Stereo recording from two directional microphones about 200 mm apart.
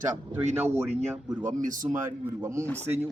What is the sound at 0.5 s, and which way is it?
Speech, 10° right (ahead or behind).